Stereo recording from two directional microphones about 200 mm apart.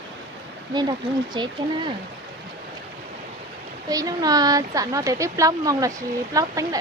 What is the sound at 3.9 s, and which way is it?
Speech, 15° right (ahead or behind).